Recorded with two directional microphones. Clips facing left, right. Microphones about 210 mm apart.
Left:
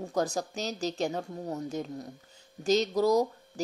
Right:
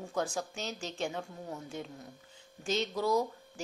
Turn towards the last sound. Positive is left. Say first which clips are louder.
# left 5 dB
turn(degrees=40)  # may be behind; listen again after turning